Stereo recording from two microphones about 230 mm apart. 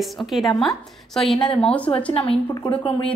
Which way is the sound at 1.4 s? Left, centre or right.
Left.